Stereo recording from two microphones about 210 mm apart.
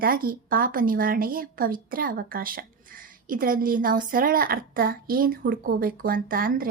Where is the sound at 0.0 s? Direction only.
45° right (ahead or behind).